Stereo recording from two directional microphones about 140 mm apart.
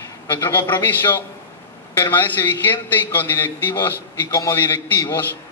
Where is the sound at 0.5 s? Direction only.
15° left (ahead or behind).